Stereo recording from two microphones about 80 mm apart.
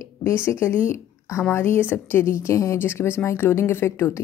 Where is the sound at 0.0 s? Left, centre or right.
Left.